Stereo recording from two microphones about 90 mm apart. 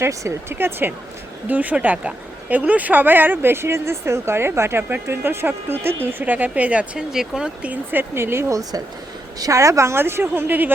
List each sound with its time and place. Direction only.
0.0 s speech: 35° right (ahead or behind)